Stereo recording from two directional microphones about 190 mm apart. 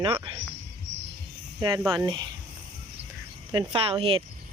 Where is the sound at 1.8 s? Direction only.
20° right (ahead or behind).